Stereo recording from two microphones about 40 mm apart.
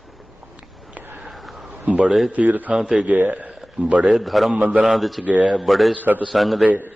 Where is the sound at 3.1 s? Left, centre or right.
Right.